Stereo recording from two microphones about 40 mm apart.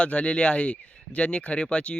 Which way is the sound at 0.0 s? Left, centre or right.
Left.